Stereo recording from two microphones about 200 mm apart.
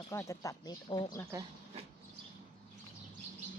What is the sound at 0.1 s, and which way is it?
Speech, 15° left (ahead or behind).